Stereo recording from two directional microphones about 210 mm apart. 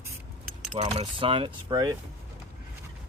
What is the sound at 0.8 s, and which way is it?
Speech, 25° right (ahead or behind).